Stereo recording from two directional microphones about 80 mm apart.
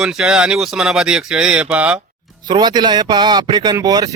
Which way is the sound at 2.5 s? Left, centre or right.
Right.